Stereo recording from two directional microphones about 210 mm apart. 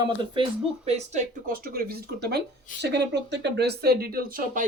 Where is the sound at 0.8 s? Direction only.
35° right (ahead or behind).